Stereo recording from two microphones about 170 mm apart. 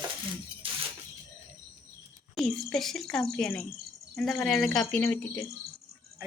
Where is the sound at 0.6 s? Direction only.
30° right (ahead or behind).